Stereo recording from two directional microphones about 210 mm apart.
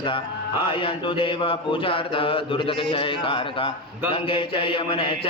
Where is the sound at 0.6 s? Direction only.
25° left (ahead or behind).